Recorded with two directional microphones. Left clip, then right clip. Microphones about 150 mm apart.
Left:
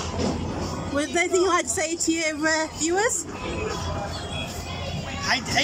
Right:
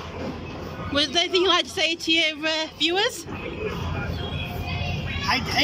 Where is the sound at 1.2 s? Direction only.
10° right (ahead or behind).